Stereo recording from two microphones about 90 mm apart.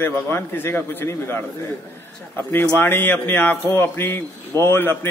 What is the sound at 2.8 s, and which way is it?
Speech, 20° left (ahead or behind).